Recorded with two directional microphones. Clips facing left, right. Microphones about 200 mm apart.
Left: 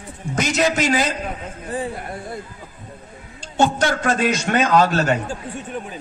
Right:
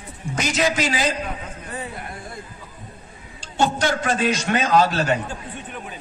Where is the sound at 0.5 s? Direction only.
45° left (ahead or behind).